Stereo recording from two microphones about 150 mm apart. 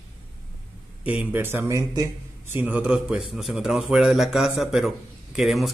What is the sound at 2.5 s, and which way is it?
A man's voice, 10° right (ahead or behind).